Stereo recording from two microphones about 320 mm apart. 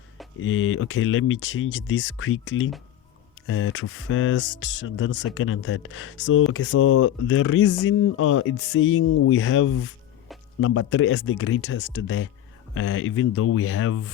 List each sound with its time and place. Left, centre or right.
0.3 s speech: left